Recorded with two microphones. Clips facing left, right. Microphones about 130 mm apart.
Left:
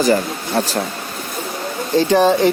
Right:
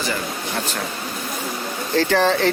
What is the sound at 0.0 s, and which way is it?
Speech, 40° left (ahead or behind).